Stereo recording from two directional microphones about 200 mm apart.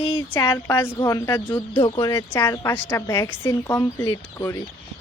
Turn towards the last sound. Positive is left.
turn(degrees=15)  # may be behind; listen again after turning